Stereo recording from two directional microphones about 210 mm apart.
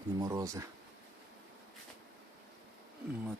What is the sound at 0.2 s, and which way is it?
Speech, 15° right (ahead or behind).